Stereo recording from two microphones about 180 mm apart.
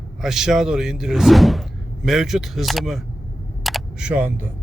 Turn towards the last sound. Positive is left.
turn(degrees=-10)  # may be behind; listen again after turning